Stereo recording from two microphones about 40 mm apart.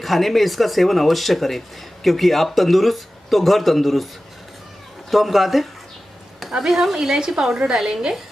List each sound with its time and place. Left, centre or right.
0.0 s speech: centre
5.1 s speech: centre